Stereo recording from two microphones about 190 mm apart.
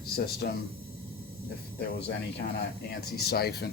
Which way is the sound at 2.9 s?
55° left (ahead or behind).